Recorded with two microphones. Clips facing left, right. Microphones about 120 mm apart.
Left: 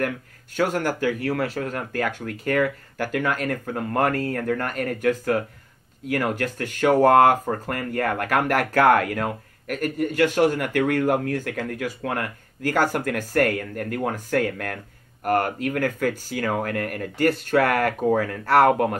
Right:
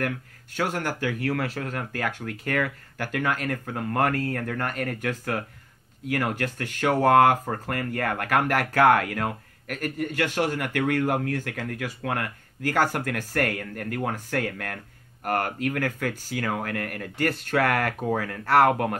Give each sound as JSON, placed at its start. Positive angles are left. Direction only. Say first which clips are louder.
{"t": 0.6, "sound": "speech", "louder": "left 5 dB", "side_deg": 45}